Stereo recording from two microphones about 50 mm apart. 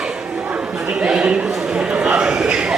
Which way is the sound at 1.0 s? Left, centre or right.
Centre.